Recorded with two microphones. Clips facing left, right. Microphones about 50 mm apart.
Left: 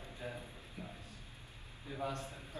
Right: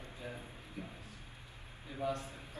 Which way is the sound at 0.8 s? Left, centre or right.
Right.